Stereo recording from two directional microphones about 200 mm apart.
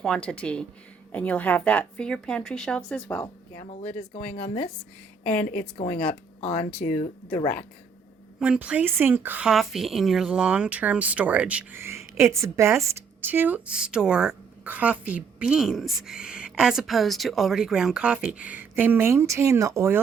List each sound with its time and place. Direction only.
0.0 s a woman's voice: 5° left (ahead or behind)
3.7 s speech: 30° left (ahead or behind)
5.2 s a woman's voice: 5° left (ahead or behind)
6.4 s speech: 30° left (ahead or behind)
7.3 s a woman's voice: 5° left (ahead or behind)
8.4 s speech: 5° right (ahead or behind)